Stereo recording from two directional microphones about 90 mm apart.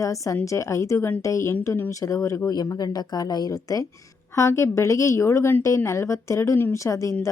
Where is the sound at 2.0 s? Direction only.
35° left (ahead or behind).